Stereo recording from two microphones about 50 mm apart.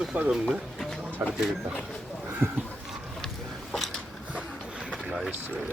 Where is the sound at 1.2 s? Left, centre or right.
Right.